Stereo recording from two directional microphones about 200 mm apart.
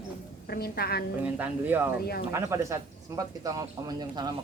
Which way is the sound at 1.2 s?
10° right (ahead or behind).